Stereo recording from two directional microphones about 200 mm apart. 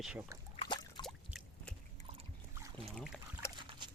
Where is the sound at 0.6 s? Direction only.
20° left (ahead or behind).